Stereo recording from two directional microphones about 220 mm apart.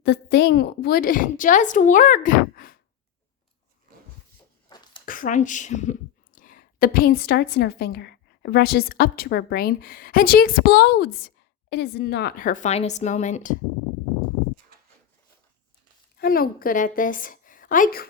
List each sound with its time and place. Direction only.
0.0 s a woman's voice: 50° left (ahead or behind)
4.7 s a sound: 20° left (ahead or behind)
5.0 s a woman's voice: 40° left (ahead or behind)
16.1 s a woman's voice: 45° left (ahead or behind)